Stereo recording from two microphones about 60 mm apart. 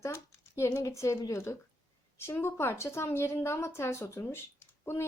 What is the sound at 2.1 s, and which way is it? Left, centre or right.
A woman's voice, left.